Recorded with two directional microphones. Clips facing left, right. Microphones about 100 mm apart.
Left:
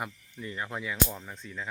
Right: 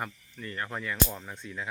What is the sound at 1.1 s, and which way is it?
Speech, 5° right (ahead or behind).